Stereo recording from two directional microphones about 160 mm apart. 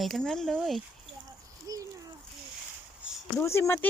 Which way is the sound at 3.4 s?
15° left (ahead or behind).